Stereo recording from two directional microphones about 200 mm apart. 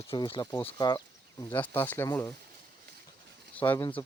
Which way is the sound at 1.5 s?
10° left (ahead or behind).